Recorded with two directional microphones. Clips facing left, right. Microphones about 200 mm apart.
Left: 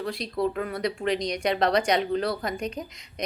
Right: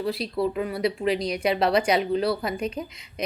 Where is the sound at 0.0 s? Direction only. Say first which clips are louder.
Right 2 dB; 5° right (ahead or behind).